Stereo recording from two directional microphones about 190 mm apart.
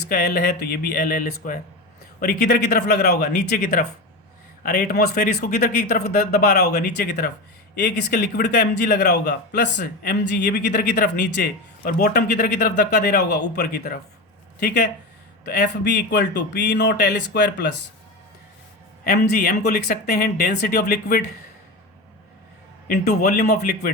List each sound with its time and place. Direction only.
0.1 s speech: 55° left (ahead or behind)
9.7 s speech: 50° left (ahead or behind)
19.0 s speech: 55° left (ahead or behind)
22.9 s speech: 55° left (ahead or behind)